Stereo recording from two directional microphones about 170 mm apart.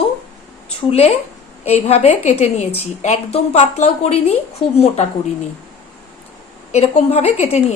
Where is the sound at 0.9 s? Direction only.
40° left (ahead or behind).